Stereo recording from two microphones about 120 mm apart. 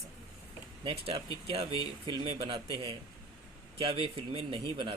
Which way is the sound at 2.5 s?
40° right (ahead or behind).